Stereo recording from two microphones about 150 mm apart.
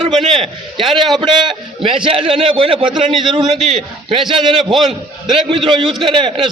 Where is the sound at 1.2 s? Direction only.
30° right (ahead or behind).